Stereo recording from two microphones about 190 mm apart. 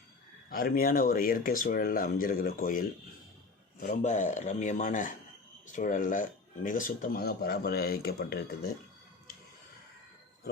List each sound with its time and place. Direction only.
0.5 s speech: 50° left (ahead or behind)